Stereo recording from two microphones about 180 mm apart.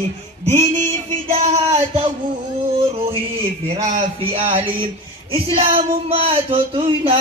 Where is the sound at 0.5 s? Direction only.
40° right (ahead or behind).